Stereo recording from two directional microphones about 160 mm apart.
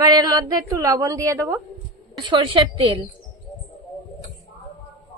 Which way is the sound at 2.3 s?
30° right (ahead or behind).